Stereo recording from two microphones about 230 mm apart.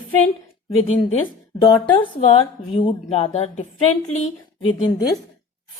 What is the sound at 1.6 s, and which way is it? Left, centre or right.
Speech, centre.